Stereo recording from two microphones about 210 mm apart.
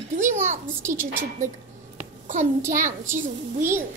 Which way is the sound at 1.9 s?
35° right (ahead or behind).